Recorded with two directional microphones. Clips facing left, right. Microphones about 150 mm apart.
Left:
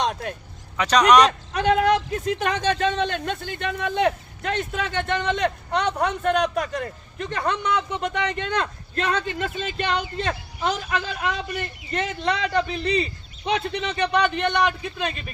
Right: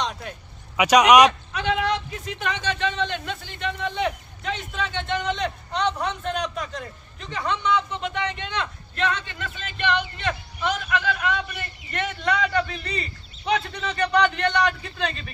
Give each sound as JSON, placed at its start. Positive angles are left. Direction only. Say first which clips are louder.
{"t": 0.0, "sound": "vehicle", "louder": "left 4 dB", "side_deg": 50}
{"t": 0.7, "sound": "speech", "louder": "right 1 dB", "side_deg": -10}
{"t": 1.5, "sound": "a man's voice", "louder": "left 5 dB", "side_deg": 45}
{"t": 14.7, "sound": "a man's voice", "louder": "left 1 dB", "side_deg": 10}